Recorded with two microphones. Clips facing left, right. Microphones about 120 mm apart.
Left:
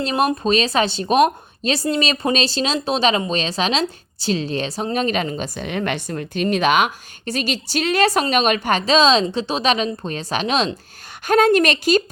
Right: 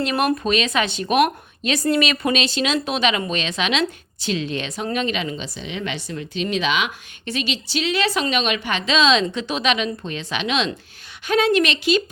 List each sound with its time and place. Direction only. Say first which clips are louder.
0.0 s a woman's voice: left 1 dB; 30° left (ahead or behind); by 12.0 s 45° left (ahead or behind)